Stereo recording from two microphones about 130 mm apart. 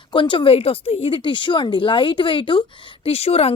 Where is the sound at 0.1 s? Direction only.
40° left (ahead or behind).